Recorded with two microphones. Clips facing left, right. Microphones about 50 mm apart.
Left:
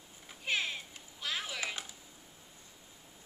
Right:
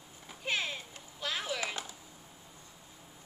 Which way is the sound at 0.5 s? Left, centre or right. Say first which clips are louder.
Even; centre.